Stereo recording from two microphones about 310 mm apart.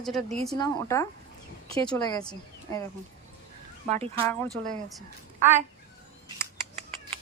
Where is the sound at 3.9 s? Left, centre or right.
Centre.